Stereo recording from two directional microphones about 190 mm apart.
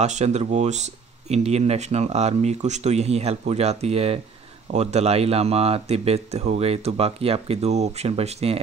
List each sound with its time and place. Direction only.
0.0 s speech: 35° right (ahead or behind)